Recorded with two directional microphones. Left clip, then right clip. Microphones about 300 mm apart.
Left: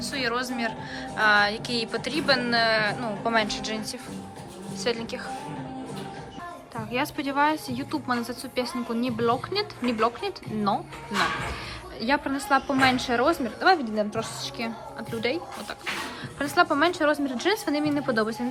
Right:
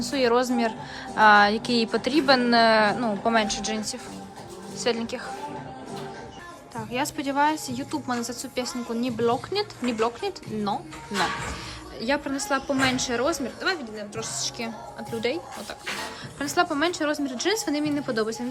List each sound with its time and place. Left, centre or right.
0.0 s a woman's voice: centre
6.7 s a woman's voice: centre
11.9 s a woman's voice: centre
16.6 s a woman's voice: centre